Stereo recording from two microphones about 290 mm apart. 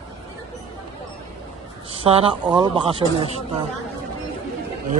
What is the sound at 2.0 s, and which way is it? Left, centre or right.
Speech, centre.